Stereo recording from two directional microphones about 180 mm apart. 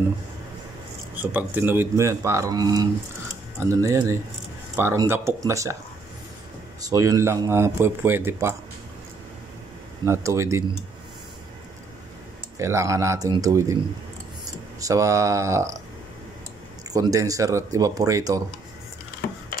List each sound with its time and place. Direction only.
1.1 s speech: 10° right (ahead or behind)
6.8 s speech: 20° right (ahead or behind)
10.0 s speech: 15° right (ahead or behind)
12.5 s speech: 15° right (ahead or behind)
14.8 s speech: 20° right (ahead or behind)
16.9 s speech: 20° right (ahead or behind)